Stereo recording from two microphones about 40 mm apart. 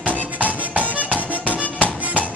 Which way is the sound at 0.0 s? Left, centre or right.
Right.